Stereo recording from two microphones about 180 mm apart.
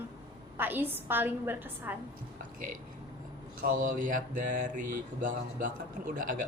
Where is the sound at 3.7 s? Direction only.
45° right (ahead or behind).